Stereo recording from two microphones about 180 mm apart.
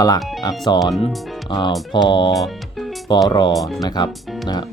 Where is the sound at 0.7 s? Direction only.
25° left (ahead or behind).